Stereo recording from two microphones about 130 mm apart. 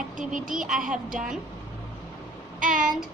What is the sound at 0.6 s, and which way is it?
Speech, 5° right (ahead or behind).